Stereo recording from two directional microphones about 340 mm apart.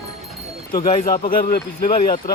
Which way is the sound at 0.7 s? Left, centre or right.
Left.